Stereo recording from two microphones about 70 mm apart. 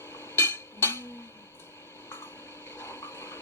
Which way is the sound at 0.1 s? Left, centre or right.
Left.